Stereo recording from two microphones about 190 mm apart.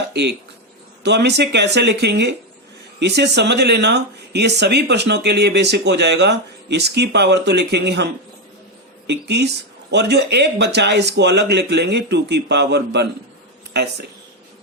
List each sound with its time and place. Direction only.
0.1 s speech: 60° right (ahead or behind)